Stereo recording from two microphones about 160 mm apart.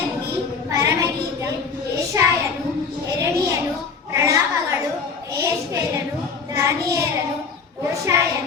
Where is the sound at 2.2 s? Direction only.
20° right (ahead or behind).